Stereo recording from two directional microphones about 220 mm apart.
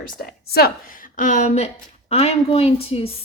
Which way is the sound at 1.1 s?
35° left (ahead or behind).